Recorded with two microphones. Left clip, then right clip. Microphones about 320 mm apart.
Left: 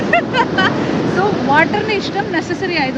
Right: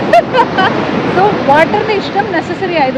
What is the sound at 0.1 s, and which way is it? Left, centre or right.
Vehicle, centre.